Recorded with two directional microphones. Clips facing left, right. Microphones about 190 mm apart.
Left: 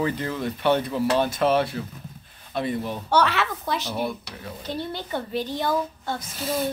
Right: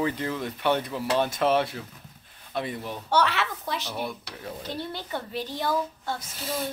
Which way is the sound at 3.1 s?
50° left (ahead or behind).